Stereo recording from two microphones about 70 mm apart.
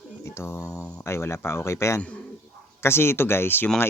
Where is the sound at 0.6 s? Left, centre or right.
Left.